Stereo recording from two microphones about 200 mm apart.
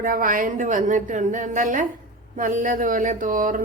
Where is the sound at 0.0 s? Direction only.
45° right (ahead or behind).